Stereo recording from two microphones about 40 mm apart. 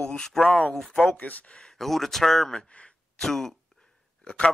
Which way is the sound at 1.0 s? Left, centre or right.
Left.